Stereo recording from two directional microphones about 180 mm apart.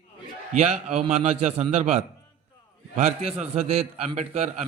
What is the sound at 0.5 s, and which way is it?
A man's voice, 40° right (ahead or behind).